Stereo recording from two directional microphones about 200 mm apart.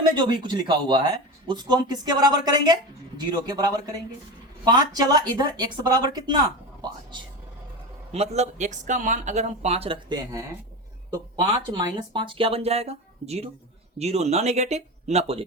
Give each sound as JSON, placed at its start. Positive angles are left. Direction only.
{"t": 0.1, "sound": "speech", "side_deg": -20}
{"t": 8.1, "sound": "speech", "side_deg": -30}